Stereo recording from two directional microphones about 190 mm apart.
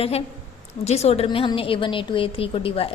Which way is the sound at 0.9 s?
35° left (ahead or behind).